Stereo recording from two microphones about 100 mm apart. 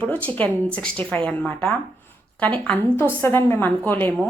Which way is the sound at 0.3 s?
15° left (ahead or behind).